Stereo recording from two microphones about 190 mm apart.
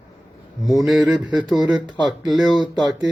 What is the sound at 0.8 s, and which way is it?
Speech, centre (ahead or behind).